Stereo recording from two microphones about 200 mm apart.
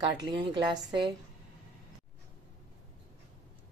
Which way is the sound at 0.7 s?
25° right (ahead or behind).